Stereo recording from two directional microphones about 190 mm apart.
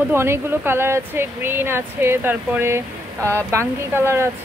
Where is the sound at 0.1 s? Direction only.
10° right (ahead or behind).